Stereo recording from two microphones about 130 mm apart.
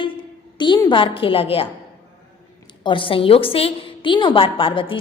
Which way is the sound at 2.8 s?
40° left (ahead or behind).